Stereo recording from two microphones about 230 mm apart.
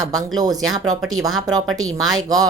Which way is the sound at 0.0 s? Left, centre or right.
Centre.